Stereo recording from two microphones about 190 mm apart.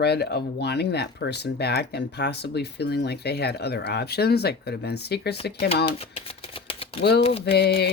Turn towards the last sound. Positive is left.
turn(degrees=55)  # may be behind; listen again after turning